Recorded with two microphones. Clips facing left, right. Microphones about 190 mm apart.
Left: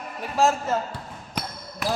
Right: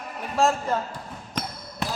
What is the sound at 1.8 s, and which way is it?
Basketball bounce, 25° right (ahead or behind).